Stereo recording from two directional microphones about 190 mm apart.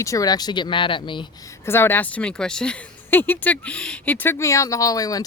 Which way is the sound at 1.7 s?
10° left (ahead or behind).